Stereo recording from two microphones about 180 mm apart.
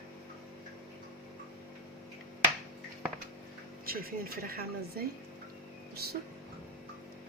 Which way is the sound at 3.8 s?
55° right (ahead or behind).